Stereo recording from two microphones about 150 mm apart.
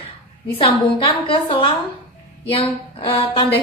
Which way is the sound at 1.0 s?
35° left (ahead or behind).